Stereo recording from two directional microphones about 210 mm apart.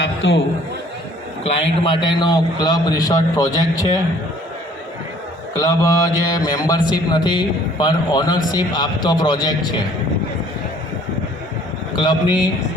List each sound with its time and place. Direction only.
0.2 s a man's voice: 60° left (ahead or behind)
1.8 s speech: 25° left (ahead or behind)
5.5 s speech: 20° left (ahead or behind)
11.9 s speech: 20° left (ahead or behind)